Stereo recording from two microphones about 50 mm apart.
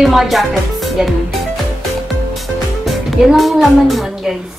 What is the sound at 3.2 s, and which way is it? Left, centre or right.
A child's voice, centre.